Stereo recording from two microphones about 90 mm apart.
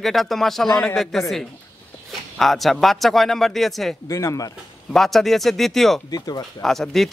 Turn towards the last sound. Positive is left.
turn(degrees=5)  # may be behind; listen again after turning